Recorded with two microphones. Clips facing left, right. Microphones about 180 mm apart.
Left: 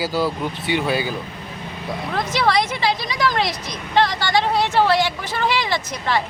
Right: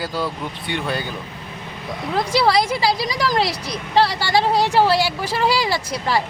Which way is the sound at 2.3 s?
35° right (ahead or behind).